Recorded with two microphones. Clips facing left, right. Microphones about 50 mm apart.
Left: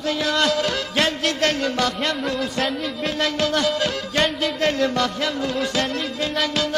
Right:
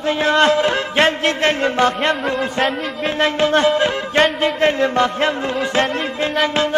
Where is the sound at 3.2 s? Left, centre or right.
Right.